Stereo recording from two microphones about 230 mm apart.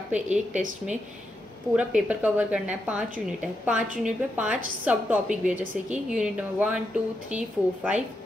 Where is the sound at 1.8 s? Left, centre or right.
Centre.